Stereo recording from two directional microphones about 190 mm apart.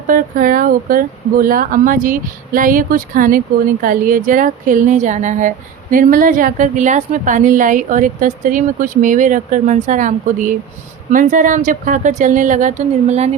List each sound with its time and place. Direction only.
0.1 s a woman's voice: 45° right (ahead or behind)